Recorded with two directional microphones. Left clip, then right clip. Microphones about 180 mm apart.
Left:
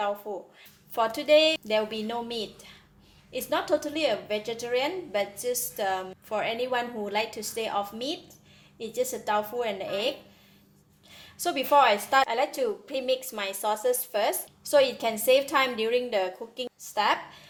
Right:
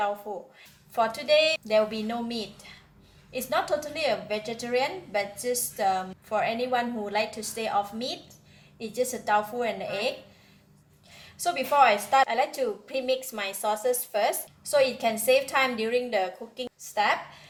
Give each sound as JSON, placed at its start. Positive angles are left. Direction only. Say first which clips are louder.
{"t": 0.9, "sound": "a woman's voice", "louder": "left 1 dB", "side_deg": 40}
{"t": 11.3, "sound": "a woman's voice", "louder": "even", "side_deg": 40}